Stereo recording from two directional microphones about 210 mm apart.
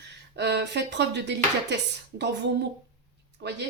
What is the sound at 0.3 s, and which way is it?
Speech, 55° right (ahead or behind).